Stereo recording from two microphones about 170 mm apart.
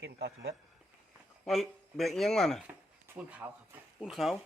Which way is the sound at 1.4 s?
Centre (ahead or behind).